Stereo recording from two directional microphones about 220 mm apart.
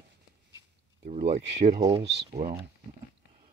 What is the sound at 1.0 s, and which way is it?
Speech, 30° right (ahead or behind).